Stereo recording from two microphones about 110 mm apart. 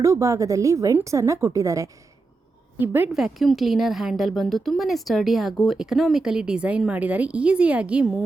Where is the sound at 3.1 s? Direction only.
Centre (ahead or behind).